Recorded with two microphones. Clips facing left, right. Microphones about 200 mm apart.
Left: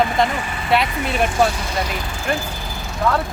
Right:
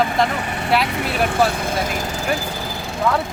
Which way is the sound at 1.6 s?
50° right (ahead or behind).